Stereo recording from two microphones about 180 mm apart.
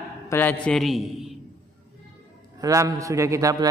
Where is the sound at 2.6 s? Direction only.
20° right (ahead or behind).